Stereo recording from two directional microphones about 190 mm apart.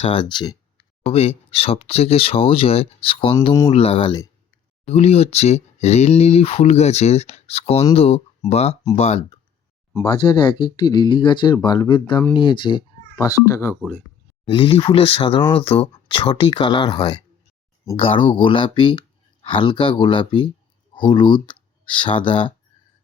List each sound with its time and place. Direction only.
0.0 s speech: 30° left (ahead or behind)
3.4 s speech: 20° left (ahead or behind)
3.7 s speech: 30° left (ahead or behind)
4.9 s speech: 35° left (ahead or behind); by 13.7 s 15° left (ahead or behind)
14.4 s speech: 25° left (ahead or behind)